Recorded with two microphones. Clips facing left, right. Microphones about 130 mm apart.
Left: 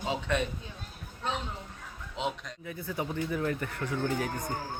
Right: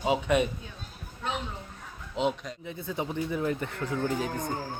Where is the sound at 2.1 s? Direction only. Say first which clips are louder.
Right 6 dB; centre (ahead or behind).